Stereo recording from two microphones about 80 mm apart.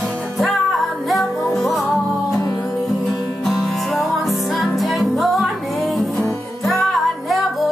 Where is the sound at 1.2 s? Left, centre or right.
Left.